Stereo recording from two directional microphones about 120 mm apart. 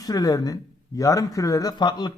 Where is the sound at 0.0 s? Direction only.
30° left (ahead or behind).